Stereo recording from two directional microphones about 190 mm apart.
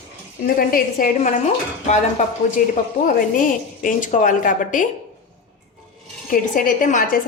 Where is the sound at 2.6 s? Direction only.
45° left (ahead or behind).